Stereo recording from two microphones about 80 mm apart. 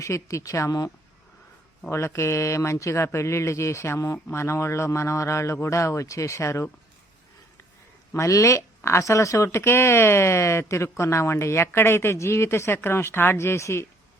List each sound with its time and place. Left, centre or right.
0.0 s speech: left
1.9 s speech: left
8.1 s speech: left